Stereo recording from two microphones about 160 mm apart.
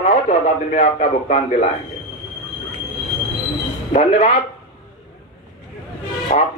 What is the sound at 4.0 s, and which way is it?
Speech, 45° left (ahead or behind).